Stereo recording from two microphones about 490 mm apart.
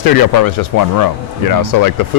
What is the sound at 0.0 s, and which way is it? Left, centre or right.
Speech, left.